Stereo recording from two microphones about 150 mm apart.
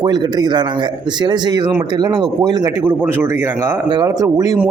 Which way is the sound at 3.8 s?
25° right (ahead or behind).